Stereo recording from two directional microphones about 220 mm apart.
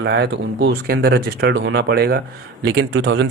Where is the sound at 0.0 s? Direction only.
50° right (ahead or behind).